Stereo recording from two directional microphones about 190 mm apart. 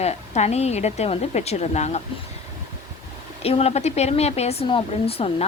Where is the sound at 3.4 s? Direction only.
30° left (ahead or behind).